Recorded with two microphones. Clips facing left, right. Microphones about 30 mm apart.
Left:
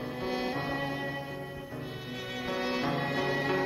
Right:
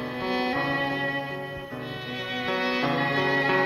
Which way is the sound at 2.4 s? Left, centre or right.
Right.